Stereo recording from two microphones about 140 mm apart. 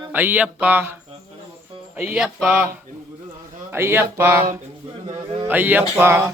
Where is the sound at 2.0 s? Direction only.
10° right (ahead or behind).